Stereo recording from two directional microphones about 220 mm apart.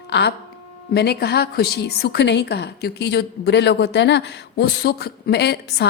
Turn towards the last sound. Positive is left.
turn(degrees=50)  # may be behind; listen again after turning